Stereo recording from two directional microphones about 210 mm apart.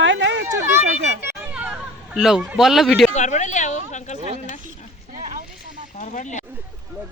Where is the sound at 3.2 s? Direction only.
35° left (ahead or behind).